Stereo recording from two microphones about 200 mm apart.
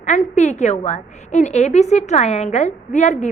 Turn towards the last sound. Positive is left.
turn(degrees=35)  # may be behind; listen again after turning